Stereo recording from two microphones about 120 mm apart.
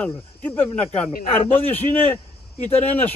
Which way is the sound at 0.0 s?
10° left (ahead or behind).